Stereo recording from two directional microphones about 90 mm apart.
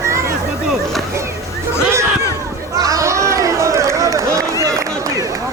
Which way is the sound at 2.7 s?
40° right (ahead or behind).